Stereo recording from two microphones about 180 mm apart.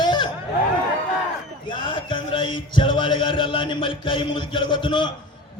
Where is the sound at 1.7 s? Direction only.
25° left (ahead or behind).